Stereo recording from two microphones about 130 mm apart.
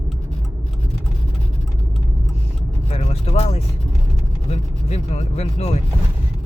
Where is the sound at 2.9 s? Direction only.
55° left (ahead or behind).